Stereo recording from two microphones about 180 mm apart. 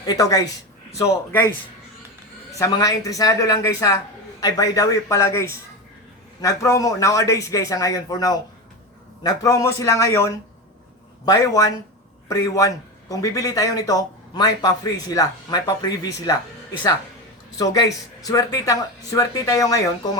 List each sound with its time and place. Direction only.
0.0 s a man's voice: 20° left (ahead or behind)
2.6 s a man's voice: 20° left (ahead or behind)
17.6 s a man's voice: 20° left (ahead or behind)